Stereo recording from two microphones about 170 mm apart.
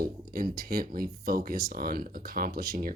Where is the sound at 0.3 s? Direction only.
60° right (ahead or behind).